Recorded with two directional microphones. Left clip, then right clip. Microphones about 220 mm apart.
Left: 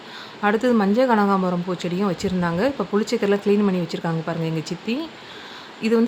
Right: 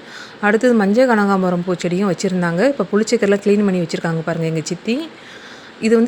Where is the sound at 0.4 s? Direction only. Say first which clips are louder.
Right 5 dB; 10° right (ahead or behind).